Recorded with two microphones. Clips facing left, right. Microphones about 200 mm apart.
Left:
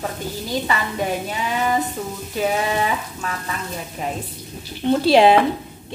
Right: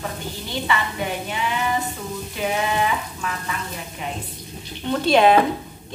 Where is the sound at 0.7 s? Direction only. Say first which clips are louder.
Right 2 dB; 40° left (ahead or behind).